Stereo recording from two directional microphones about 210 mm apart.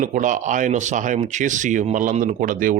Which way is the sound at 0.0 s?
40° right (ahead or behind).